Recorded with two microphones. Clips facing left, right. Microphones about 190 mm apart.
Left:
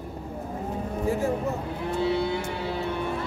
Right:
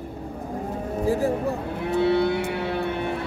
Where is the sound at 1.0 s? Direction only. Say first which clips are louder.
Right 4 dB; 35° right (ahead or behind).